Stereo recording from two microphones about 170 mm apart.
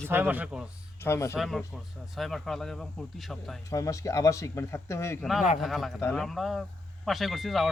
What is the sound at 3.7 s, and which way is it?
Speech, 20° left (ahead or behind).